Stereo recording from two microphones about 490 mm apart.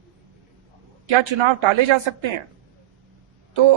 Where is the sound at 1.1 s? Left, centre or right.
Right.